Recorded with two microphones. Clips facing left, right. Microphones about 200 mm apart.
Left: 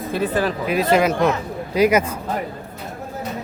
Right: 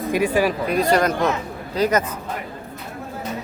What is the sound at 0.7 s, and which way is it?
A man's voice, 5° left (ahead or behind).